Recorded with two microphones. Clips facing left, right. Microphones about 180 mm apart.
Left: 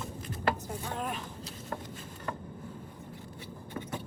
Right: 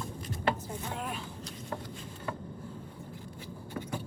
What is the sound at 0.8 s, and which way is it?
Speech, 35° left (ahead or behind).